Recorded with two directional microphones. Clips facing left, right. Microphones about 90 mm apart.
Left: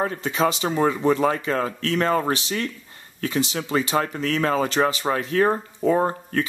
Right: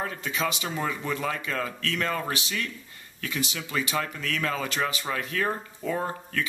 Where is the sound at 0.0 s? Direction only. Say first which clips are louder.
Left 7 dB; 35° left (ahead or behind).